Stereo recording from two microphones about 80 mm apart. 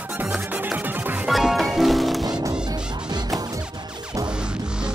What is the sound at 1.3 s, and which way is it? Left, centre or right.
Music, centre.